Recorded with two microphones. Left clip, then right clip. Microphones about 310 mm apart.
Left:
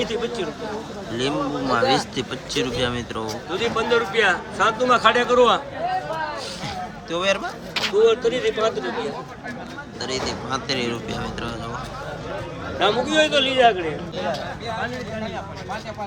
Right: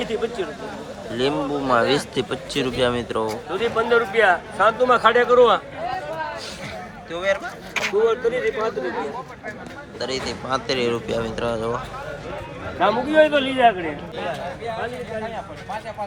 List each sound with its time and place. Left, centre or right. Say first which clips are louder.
0.0 s a man's voice: even; centre
7.4 s a man's voice: even; centre
8.0 s a man's voice: left 3 dB; centre
10.0 s a man's voice: even; centre
12.8 s a man's voice: right 2 dB; centre